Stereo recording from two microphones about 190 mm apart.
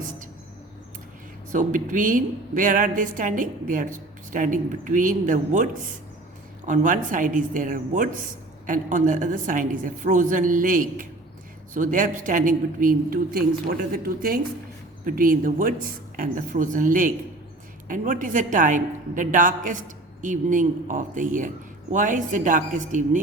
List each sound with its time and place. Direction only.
1.5 s a woman's voice: 45° right (ahead or behind)
6.7 s a woman's voice: 45° right (ahead or behind)